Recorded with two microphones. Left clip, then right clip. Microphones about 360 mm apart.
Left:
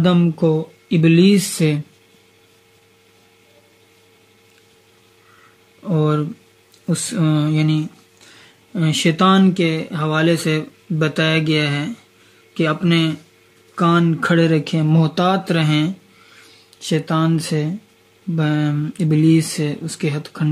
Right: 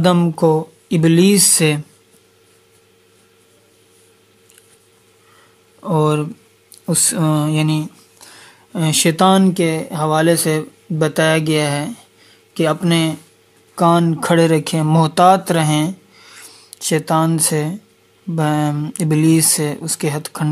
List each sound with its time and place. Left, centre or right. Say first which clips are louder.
0.0 s speech: right 3 dB; centre
5.9 s speech: right 3 dB; centre